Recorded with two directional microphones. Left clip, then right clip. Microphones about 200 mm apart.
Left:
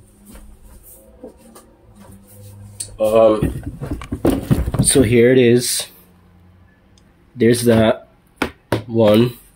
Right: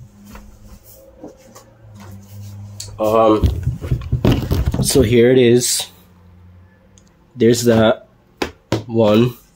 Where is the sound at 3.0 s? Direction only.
35° right (ahead or behind).